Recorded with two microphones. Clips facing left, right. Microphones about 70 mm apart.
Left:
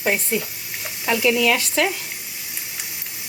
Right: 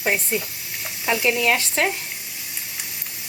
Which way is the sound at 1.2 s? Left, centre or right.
Right.